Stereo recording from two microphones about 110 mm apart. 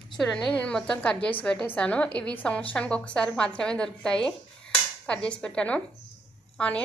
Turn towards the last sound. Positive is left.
turn(degrees=10)  # may be behind; listen again after turning